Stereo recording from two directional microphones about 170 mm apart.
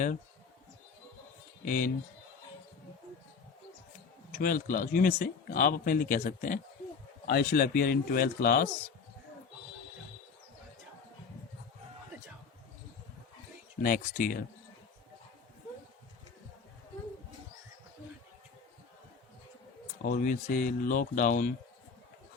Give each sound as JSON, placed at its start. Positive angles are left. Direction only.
{"t": 1.6, "sound": "speech", "side_deg": 50}
{"t": 4.3, "sound": "speech", "side_deg": 55}
{"t": 7.3, "sound": "speech", "side_deg": 60}
{"t": 13.8, "sound": "speech", "side_deg": 55}
{"t": 20.1, "sound": "speech", "side_deg": 50}